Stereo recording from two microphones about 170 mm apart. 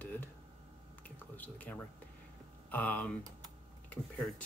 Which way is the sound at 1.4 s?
10° left (ahead or behind).